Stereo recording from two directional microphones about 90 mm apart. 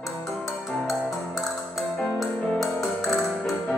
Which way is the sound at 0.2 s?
Centre (ahead or behind).